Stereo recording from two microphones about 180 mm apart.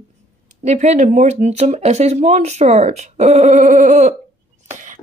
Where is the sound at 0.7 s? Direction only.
40° right (ahead or behind).